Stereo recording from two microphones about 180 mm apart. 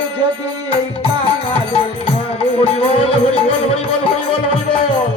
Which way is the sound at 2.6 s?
35° left (ahead or behind).